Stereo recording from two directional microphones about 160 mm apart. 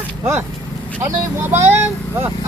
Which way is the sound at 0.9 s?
15° right (ahead or behind).